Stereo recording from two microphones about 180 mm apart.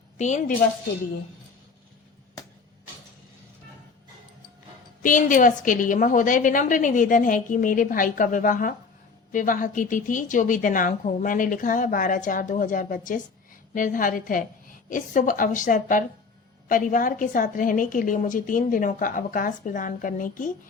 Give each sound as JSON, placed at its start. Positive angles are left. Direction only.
{"t": 0.2, "sound": "a woman's voice", "side_deg": 45}
{"t": 5.0, "sound": "a woman's voice", "side_deg": 45}